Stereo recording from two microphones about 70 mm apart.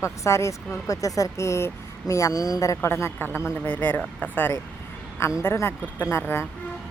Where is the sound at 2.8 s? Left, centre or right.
Left.